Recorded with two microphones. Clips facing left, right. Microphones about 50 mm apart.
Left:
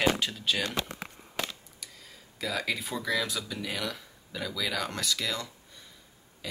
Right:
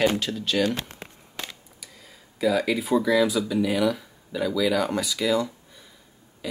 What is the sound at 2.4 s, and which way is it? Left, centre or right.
Speech, centre.